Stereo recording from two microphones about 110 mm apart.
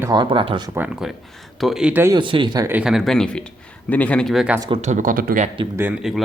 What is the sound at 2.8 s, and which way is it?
A man's voice, centre (ahead or behind).